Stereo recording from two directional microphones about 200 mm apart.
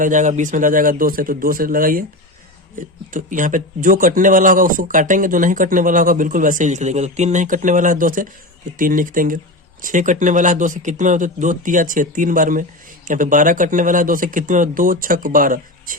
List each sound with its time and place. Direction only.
0.0 s a man's voice: 40° right (ahead or behind)